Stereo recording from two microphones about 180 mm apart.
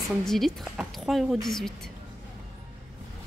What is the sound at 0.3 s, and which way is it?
Speech, centre (ahead or behind).